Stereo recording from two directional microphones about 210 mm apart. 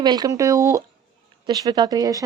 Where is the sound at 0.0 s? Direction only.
20° right (ahead or behind).